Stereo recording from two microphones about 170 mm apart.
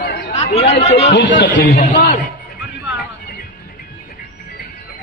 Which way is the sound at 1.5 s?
50° left (ahead or behind).